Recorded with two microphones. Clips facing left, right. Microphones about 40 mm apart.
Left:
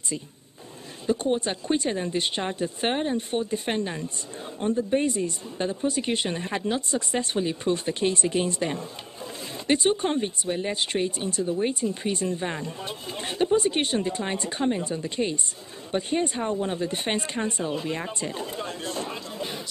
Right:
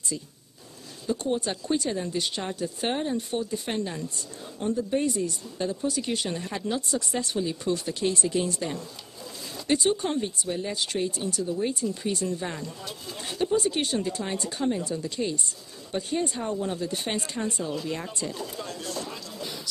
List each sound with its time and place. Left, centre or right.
1.0 s speech: left